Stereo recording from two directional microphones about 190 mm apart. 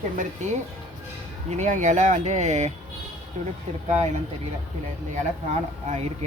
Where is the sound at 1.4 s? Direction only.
40° right (ahead or behind).